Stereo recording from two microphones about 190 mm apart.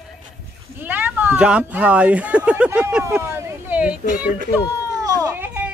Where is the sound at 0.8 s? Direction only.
10° right (ahead or behind).